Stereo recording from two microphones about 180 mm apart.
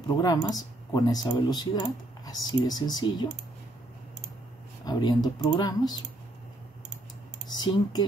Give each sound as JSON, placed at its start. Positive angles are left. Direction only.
{"t": 0.2, "sound": "speech", "side_deg": 20}
{"t": 4.8, "sound": "speech", "side_deg": 20}
{"t": 7.4, "sound": "speech", "side_deg": 25}